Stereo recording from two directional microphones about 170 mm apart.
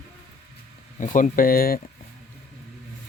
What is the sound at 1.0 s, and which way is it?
Speech, 50° left (ahead or behind).